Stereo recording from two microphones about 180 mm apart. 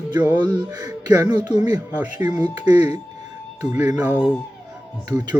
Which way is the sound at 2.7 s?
40° left (ahead or behind).